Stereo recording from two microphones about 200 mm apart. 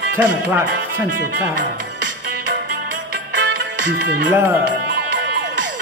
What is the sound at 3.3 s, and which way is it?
Music, 60° right (ahead or behind).